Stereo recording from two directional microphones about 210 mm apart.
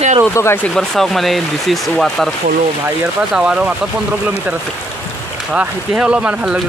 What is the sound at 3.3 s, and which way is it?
Speech, 5° right (ahead or behind).